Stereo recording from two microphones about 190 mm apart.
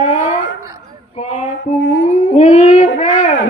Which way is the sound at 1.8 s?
80° left.